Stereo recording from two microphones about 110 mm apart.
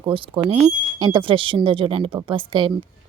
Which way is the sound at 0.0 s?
40° right (ahead or behind).